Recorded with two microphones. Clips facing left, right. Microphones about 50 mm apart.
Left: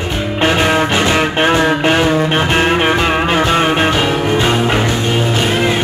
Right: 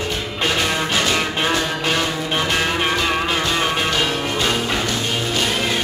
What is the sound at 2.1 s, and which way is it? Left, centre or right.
Music, left.